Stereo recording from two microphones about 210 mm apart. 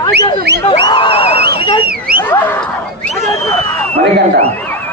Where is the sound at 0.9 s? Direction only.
25° left (ahead or behind).